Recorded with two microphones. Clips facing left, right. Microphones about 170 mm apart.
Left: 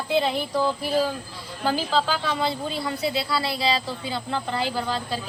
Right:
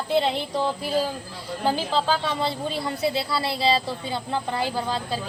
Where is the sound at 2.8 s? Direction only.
25° right (ahead or behind).